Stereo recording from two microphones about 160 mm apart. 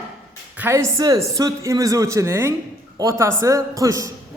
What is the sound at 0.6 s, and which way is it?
A man's voice, 15° right (ahead or behind).